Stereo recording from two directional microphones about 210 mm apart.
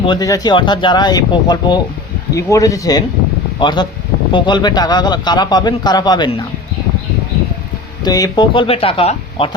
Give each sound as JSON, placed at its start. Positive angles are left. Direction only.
{"t": 0.0, "sound": "a man's voice", "side_deg": 20}
{"t": 8.0, "sound": "a man's voice", "side_deg": 20}